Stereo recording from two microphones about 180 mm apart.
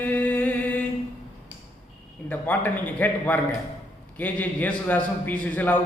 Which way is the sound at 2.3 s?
10° left (ahead or behind).